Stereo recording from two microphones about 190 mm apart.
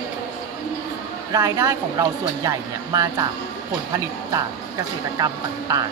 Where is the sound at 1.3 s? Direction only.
20° right (ahead or behind).